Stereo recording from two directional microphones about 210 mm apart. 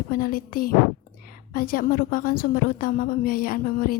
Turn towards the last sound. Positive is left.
turn(degrees=40)  # may be behind; listen again after turning